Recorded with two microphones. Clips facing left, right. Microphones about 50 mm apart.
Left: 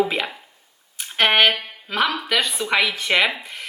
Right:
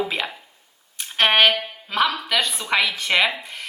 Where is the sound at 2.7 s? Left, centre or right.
Centre.